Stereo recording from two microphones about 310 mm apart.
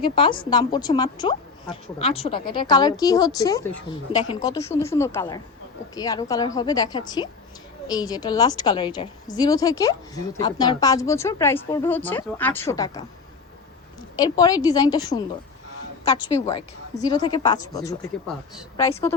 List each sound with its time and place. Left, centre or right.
0.0 s a woman's voice: centre
14.2 s a woman's voice: centre